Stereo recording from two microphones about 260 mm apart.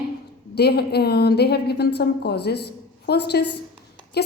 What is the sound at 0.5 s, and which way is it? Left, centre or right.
A woman's voice, left.